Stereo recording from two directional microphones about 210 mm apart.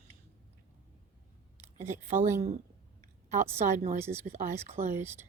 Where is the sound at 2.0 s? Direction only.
35° right (ahead or behind).